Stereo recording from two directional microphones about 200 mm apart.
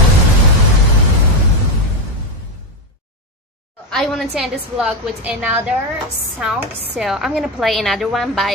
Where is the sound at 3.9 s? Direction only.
Centre (ahead or behind).